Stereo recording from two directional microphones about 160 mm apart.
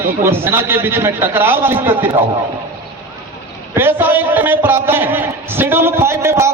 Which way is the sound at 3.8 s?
15° right (ahead or behind).